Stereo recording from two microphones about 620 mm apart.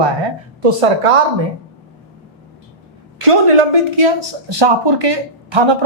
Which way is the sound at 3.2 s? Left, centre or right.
Right.